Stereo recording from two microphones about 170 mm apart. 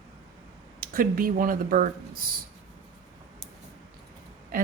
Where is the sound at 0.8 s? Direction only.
55° right (ahead or behind).